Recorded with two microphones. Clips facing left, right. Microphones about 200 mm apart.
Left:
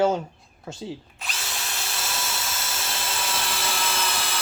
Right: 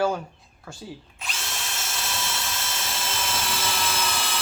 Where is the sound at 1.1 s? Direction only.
Centre (ahead or behind).